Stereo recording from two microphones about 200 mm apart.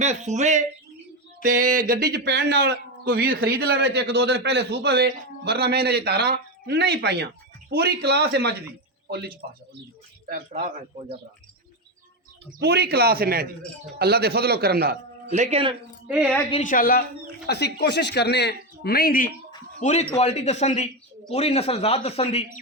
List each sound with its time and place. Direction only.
0.0 s speech: 35° right (ahead or behind)
1.4 s a sound: 40° right (ahead or behind)
1.9 s a man's voice: 50° right (ahead or behind)
3.1 s a man's voice: 45° right (ahead or behind)
12.5 s a man's voice: 55° right (ahead or behind); by 15.7 s 30° right (ahead or behind)
16.0 s speech: 5° right (ahead or behind)
16.5 s speech: 40° left (ahead or behind)
19.8 s speech: 35° left (ahead or behind)